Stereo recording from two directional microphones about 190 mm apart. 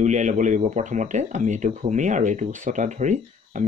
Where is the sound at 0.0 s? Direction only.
40° right (ahead or behind).